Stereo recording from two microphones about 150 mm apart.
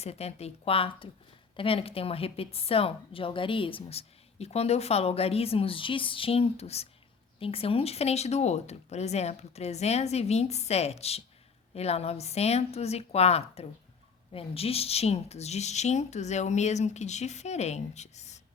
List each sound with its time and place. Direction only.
0.0 s a woman's voice: 45° left (ahead or behind)